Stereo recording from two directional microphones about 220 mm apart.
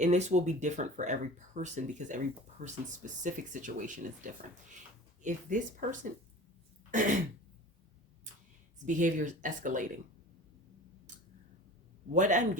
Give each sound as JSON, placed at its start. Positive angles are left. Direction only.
{"t": 0.0, "sound": "speech", "side_deg": -30}
{"t": 8.9, "sound": "speech", "side_deg": -35}
{"t": 12.1, "sound": "speech", "side_deg": -35}